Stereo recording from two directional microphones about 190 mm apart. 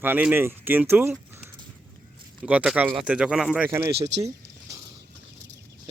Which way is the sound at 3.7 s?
15° right (ahead or behind).